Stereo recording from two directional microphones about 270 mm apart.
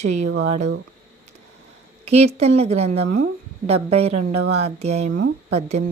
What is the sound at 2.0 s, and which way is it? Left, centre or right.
Speech, right.